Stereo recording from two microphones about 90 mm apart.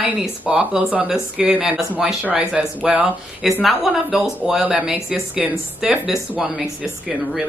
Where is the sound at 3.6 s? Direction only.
5° right (ahead or behind).